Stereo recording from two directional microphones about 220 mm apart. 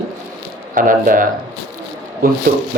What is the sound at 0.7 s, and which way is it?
Speech, 40° right (ahead or behind).